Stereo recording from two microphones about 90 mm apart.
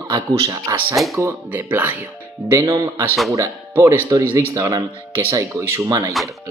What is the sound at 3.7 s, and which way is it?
Speech, 25° right (ahead or behind).